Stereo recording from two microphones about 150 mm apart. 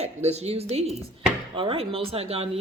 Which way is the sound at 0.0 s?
45° right (ahead or behind).